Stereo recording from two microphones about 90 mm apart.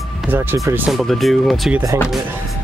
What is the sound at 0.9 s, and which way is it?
Speech, centre (ahead or behind).